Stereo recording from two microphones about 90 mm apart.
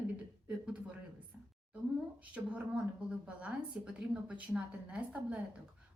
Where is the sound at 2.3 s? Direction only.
15° right (ahead or behind).